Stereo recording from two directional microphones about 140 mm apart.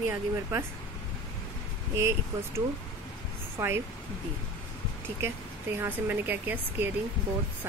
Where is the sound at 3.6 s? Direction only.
15° right (ahead or behind).